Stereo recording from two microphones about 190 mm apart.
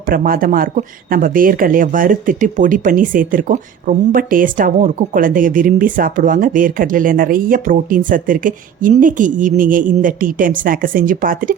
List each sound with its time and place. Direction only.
0.1 s speech: 50° right (ahead or behind)